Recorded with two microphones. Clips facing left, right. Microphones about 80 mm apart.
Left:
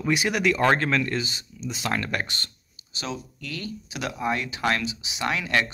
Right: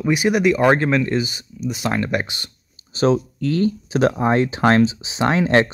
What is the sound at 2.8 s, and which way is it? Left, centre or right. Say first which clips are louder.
Speech: right 16 dB; right.